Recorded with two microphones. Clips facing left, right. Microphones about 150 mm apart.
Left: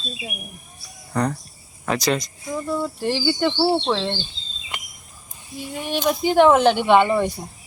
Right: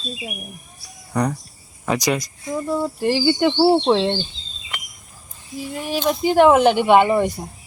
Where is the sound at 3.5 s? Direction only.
20° right (ahead or behind).